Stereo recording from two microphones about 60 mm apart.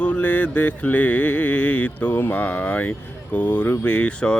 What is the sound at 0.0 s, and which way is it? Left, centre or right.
Music, left.